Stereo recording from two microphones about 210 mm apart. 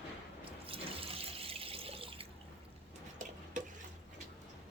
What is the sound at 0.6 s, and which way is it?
Water, 25° right (ahead or behind).